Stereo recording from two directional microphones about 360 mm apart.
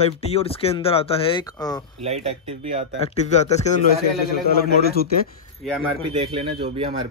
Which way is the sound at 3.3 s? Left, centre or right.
Centre.